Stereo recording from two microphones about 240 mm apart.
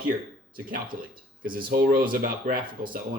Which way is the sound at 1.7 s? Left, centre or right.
Right.